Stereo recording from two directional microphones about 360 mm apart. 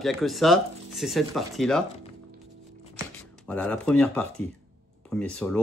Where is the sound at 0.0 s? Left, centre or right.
Centre.